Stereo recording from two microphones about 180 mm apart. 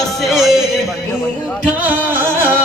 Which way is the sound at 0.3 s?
Centre (ahead or behind).